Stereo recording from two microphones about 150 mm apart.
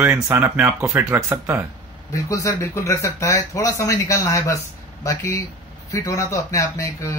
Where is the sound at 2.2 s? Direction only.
20° left (ahead or behind).